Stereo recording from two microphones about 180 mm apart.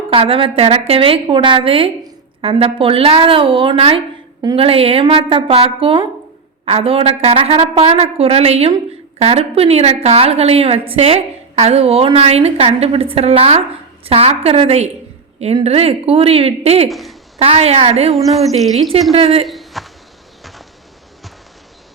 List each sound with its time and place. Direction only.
0.1 s a woman's voice: 30° right (ahead or behind)
16.9 s a sound: centre (ahead or behind)
17.4 s a woman's voice: 35° right (ahead or behind)
18.1 s speech: centre (ahead or behind)
19.1 s a woman's voice: 30° right (ahead or behind)
19.5 s a sound: centre (ahead or behind)
20.4 s insect: centre (ahead or behind)